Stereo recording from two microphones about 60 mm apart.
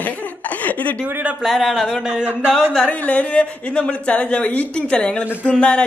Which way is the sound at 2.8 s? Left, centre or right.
Left.